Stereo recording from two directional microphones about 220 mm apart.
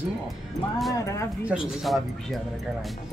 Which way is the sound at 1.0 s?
15° left (ahead or behind).